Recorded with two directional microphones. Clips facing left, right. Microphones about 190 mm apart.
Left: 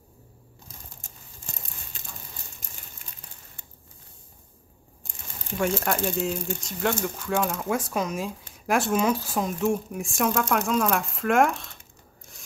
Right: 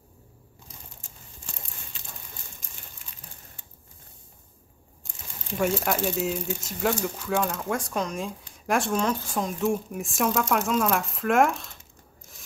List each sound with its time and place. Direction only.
5.6 s speech: 5° right (ahead or behind)